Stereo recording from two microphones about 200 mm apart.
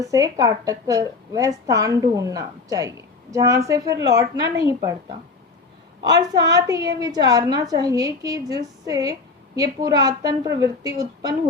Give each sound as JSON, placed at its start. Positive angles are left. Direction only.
{"t": 0.0, "sound": "a woman's voice", "side_deg": -15}
{"t": 6.1, "sound": "a woman's voice", "side_deg": -20}